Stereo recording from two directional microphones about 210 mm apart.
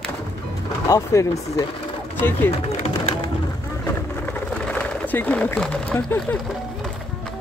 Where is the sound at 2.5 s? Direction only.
30° left (ahead or behind).